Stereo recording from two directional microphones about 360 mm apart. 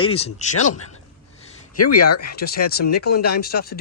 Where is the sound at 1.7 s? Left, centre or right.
Left.